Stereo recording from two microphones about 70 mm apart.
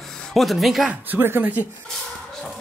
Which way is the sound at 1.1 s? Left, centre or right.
Right.